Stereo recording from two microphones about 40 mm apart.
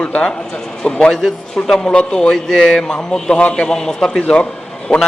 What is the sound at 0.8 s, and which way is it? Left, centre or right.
A man's voice, left.